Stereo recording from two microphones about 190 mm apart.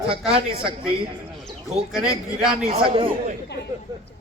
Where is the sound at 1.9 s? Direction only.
5° right (ahead or behind).